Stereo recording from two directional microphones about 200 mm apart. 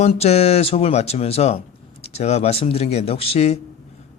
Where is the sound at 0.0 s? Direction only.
30° left (ahead or behind).